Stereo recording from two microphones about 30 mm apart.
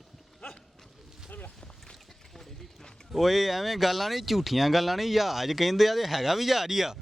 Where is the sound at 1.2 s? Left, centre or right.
Left.